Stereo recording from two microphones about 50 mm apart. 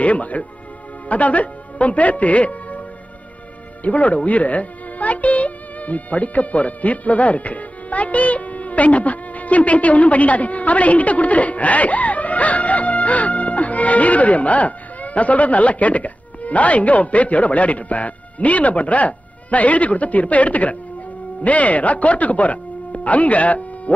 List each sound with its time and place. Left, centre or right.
0.0 s a man's voice: left
3.8 s speech: left